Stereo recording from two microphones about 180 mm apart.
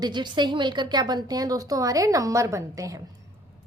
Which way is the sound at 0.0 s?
25° right (ahead or behind).